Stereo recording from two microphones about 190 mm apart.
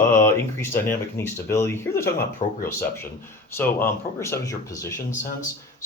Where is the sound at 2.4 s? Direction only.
35° left (ahead or behind).